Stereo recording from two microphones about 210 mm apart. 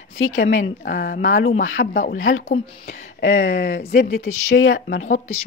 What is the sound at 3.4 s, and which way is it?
Speech, 55° left (ahead or behind).